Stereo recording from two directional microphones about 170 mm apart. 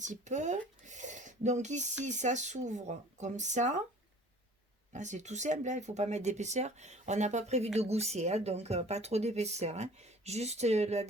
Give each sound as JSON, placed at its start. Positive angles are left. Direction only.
{"t": 0.0, "sound": "speech", "side_deg": -45}
{"t": 4.9, "sound": "speech", "side_deg": -45}